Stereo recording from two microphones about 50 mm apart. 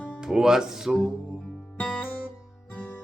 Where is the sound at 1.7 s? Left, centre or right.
Left.